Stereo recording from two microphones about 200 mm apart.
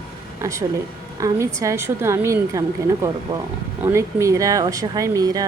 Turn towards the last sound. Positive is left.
turn(degrees=-20)  # may be behind; listen again after turning